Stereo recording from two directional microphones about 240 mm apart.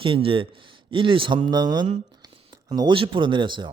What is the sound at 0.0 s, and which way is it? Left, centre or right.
Speech, right.